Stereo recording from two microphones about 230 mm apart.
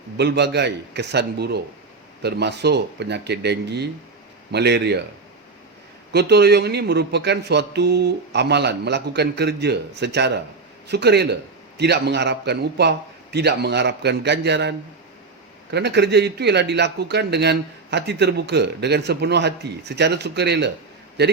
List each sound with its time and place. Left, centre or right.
0.2 s speech: right
6.1 s speech: right